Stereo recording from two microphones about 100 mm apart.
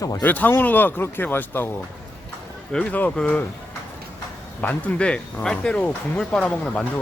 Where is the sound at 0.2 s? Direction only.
15° left (ahead or behind).